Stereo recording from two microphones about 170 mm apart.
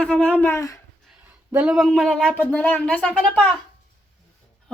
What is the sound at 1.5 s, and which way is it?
Speech, 10° right (ahead or behind).